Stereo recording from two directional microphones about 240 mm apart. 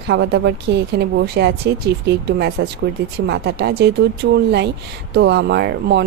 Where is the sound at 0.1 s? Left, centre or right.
Right.